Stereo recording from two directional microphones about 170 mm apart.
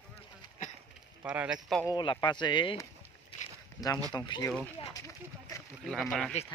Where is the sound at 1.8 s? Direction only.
25° left (ahead or behind).